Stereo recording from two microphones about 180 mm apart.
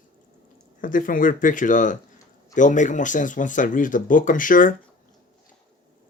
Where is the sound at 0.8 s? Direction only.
50° left (ahead or behind).